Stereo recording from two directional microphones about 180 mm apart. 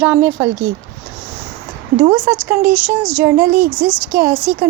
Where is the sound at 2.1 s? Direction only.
10° right (ahead or behind).